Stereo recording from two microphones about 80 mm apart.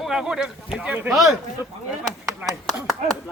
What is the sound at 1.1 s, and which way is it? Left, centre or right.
Speech, centre.